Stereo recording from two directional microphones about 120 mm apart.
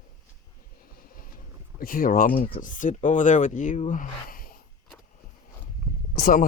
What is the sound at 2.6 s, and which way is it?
Speech, 90° left.